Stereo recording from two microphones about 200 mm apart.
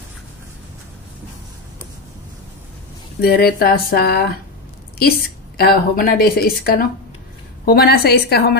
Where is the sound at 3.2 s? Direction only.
50° left (ahead or behind).